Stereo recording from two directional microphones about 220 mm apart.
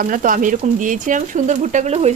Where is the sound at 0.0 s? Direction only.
40° right (ahead or behind).